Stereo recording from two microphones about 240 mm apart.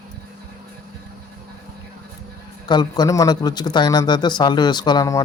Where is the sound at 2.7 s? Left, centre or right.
Centre.